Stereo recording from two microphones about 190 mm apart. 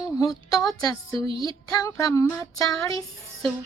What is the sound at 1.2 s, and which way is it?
Music, 30° right (ahead or behind).